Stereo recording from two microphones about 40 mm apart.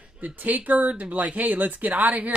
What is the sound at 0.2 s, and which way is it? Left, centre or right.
Speech, right.